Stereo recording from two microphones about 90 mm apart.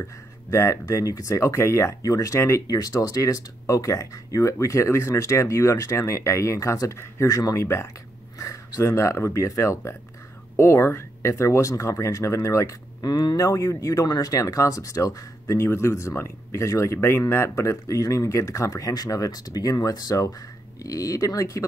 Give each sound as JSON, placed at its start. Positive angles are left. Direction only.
{"t": 0.0, "sound": "speech", "side_deg": 35}